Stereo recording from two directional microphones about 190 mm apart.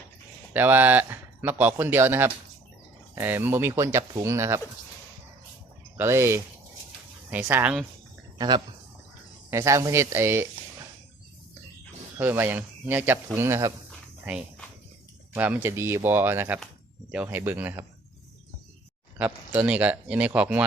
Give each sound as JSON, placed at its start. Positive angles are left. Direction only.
{"t": 0.5, "sound": "speech", "side_deg": -10}
{"t": 6.0, "sound": "speech", "side_deg": -15}
{"t": 8.4, "sound": "speech", "side_deg": -25}
{"t": 12.1, "sound": "speech", "side_deg": -10}
{"t": 15.4, "sound": "speech", "side_deg": -10}
{"t": 19.5, "sound": "speech", "side_deg": -5}